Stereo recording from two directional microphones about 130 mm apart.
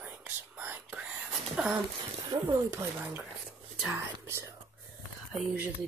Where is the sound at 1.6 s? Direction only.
5° right (ahead or behind).